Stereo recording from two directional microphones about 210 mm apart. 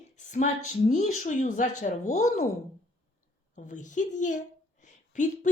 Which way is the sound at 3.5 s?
35° left (ahead or behind).